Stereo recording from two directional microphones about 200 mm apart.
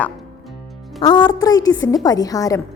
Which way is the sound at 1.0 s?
25° left (ahead or behind).